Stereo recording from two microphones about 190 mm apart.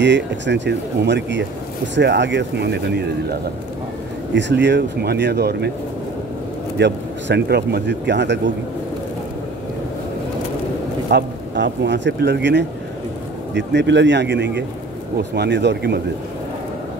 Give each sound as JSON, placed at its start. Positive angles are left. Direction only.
{"t": 0.0, "sound": "speech", "side_deg": -65}
{"t": 4.3, "sound": "speech", "side_deg": -70}
{"t": 6.8, "sound": "speech", "side_deg": -65}
{"t": 11.1, "sound": "speech", "side_deg": -65}